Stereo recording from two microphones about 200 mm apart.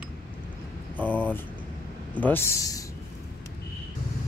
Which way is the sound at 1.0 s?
10° left (ahead or behind).